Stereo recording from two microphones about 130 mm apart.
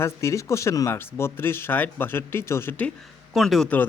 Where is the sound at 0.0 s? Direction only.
20° left (ahead or behind).